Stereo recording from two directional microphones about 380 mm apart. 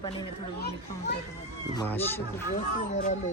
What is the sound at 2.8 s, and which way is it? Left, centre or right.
Speech, centre.